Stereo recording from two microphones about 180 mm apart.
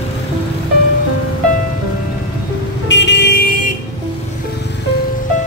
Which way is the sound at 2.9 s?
75° left (ahead or behind).